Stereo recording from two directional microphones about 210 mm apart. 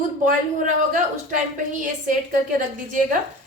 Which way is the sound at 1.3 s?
40° right (ahead or behind).